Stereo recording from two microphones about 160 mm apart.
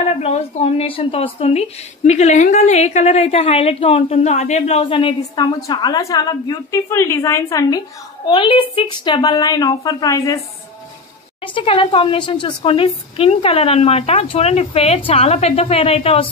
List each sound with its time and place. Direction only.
0.2 s a woman's voice: 40° left (ahead or behind); by 7.8 s 20° left (ahead or behind)
8.3 s a woman's voice: 30° left (ahead or behind)
11.4 s a woman's voice: 30° left (ahead or behind)